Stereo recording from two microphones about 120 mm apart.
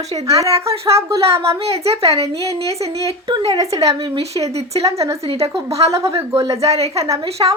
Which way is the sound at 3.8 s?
60° right (ahead or behind).